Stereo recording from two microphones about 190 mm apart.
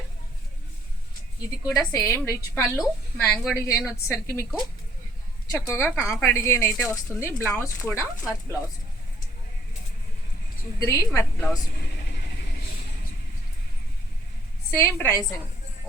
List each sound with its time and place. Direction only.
1.4 s a woman's voice: 20° left (ahead or behind)
2.7 s a woman's voice: 5° left (ahead or behind)
3.5 s a woman's voice: 15° left (ahead or behind)
7.9 s speech: 10° right (ahead or behind)
10.8 s a woman's voice: 20° left (ahead or behind)
14.8 s a woman's voice: 15° left (ahead or behind)